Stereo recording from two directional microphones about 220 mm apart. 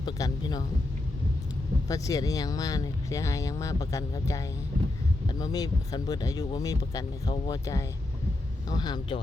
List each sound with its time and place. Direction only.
0.0 s speech: 20° left (ahead or behind)
1.9 s speech: 15° left (ahead or behind)